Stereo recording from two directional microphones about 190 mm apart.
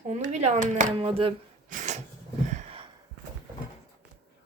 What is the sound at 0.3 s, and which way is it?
Speech, 40° right (ahead or behind).